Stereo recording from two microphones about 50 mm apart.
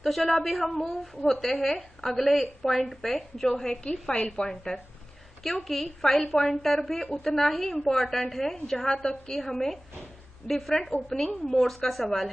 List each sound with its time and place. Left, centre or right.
0.0 s a woman's voice: centre
4.1 s a woman's voice: left
4.7 s a woman's voice: centre
10.9 s a woman's voice: centre